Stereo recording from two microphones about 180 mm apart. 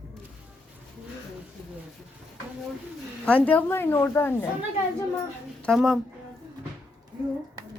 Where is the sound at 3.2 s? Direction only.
10° left (ahead or behind).